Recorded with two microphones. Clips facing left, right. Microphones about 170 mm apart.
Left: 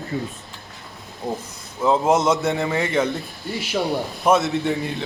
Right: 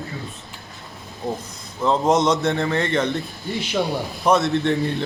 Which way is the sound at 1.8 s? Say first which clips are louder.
Even; 5° left (ahead or behind).